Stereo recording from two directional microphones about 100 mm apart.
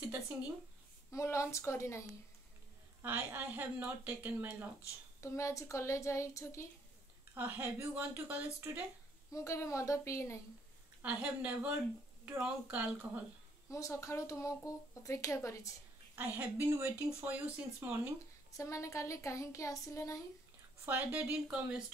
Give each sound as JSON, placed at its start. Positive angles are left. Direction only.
{"t": 1.1, "sound": "a woman's voice", "side_deg": 30}
{"t": 3.0, "sound": "speech", "side_deg": -20}
{"t": 5.2, "sound": "a woman's voice", "side_deg": 30}
{"t": 7.3, "sound": "speech", "side_deg": -20}
{"t": 9.3, "sound": "speech", "side_deg": 30}
{"t": 11.0, "sound": "speech", "side_deg": -15}
{"t": 13.7, "sound": "speech", "side_deg": 30}
{"t": 16.2, "sound": "speech", "side_deg": -15}
{"t": 18.6, "sound": "speech", "side_deg": 30}
{"t": 20.8, "sound": "speech", "side_deg": -15}